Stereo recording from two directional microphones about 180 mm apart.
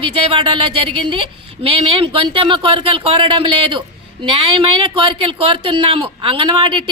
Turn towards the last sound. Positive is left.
turn(degrees=-25)  # may be behind; listen again after turning